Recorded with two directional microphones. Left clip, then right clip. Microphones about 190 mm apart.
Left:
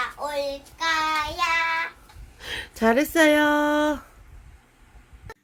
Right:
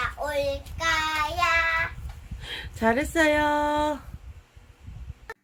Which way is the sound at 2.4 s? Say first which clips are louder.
Left 3 dB; 30° left (ahead or behind).